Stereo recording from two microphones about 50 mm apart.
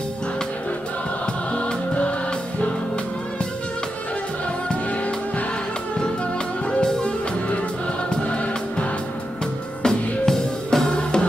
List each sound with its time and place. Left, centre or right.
1.2 s music: left
6.7 s music: centre
9.8 s music: centre